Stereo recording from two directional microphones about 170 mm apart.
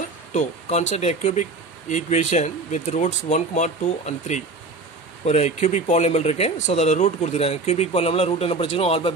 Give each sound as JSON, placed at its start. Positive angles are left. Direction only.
{"t": 0.3, "sound": "speech", "side_deg": 45}